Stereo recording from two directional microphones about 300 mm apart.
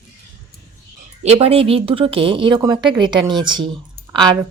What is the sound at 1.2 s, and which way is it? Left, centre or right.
Speech, centre.